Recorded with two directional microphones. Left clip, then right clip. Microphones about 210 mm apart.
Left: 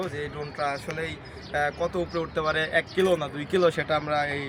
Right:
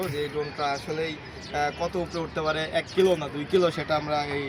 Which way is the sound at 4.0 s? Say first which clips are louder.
Left 1 dB; centre (ahead or behind).